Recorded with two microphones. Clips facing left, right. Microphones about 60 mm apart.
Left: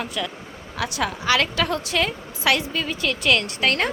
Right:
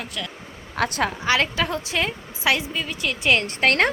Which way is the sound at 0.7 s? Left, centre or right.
Right.